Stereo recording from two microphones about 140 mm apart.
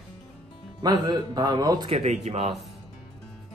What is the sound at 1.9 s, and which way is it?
Speech, 50° right (ahead or behind).